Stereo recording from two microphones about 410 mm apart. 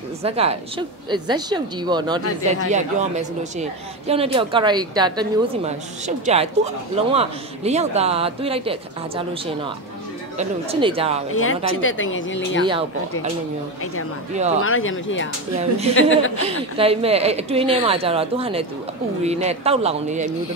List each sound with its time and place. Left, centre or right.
0.2 s a woman's voice: centre
10.3 s a woman's voice: centre
11.3 s speech: left
14.3 s a woman's voice: centre
14.6 s speech: left
16.3 s a woman's voice: centre